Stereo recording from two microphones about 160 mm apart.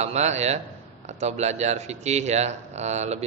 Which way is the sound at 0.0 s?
45° right (ahead or behind).